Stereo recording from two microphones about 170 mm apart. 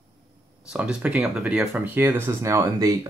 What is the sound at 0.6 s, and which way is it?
Speech, 5° right (ahead or behind).